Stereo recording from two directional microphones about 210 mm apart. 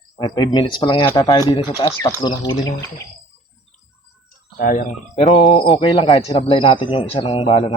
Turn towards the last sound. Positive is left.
turn(degrees=25)  # may be behind; listen again after turning